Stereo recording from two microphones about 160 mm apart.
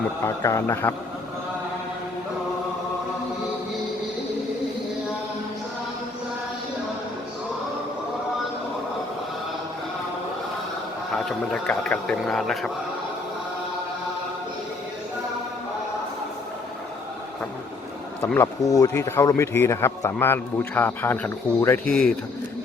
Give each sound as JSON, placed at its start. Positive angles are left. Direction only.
{"t": 0.2, "sound": "speech", "side_deg": 20}
{"t": 11.1, "sound": "speech", "side_deg": 5}
{"t": 18.3, "sound": "speech", "side_deg": 20}
{"t": 21.8, "sound": "speech", "side_deg": 0}